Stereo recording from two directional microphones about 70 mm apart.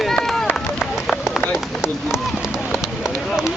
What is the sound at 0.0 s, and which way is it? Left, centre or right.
Run, centre.